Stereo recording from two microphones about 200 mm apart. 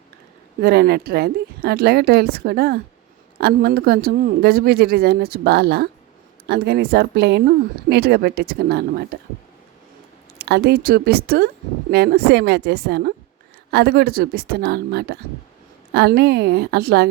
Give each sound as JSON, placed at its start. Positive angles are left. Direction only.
{"t": 0.6, "sound": "speech", "side_deg": -50}
{"t": 10.3, "sound": "a woman's voice", "side_deg": -55}